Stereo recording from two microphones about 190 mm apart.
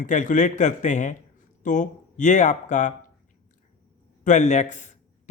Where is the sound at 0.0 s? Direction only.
40° left (ahead or behind).